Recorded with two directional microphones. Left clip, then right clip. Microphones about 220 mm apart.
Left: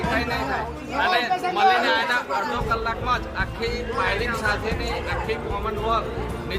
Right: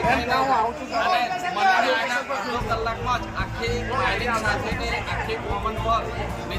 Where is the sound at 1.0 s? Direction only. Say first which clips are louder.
Left 2 dB; 25° left (ahead or behind).